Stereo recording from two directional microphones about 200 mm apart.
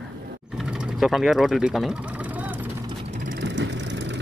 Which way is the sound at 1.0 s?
Centre (ahead or behind).